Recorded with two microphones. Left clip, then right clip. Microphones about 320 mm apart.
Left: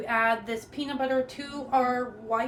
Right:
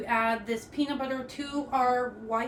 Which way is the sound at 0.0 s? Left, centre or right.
Centre.